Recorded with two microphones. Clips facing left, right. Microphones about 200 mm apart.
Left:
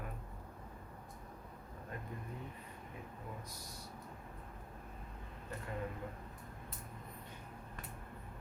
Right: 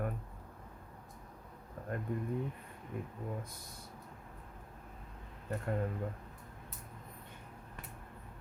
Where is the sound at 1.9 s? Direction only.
55° right (ahead or behind).